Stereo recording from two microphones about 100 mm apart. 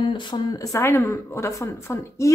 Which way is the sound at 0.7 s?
25° left (ahead or behind).